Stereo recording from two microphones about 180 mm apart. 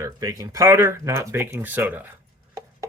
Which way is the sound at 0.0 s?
20° right (ahead or behind).